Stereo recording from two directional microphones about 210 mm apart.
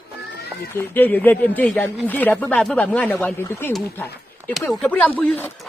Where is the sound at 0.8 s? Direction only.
10° left (ahead or behind).